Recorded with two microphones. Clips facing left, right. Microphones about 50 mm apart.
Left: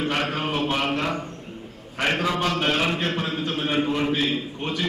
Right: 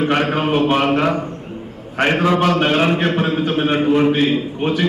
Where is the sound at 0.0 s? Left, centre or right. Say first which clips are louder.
Right 8 dB; right.